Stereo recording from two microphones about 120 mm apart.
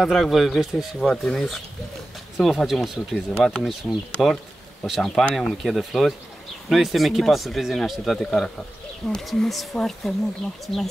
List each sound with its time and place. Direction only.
0.0 s speech: centre (ahead or behind)